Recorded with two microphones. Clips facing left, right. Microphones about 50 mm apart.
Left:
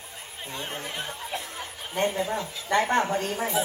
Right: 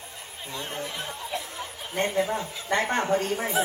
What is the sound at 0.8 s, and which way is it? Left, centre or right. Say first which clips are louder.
Speech: even; left.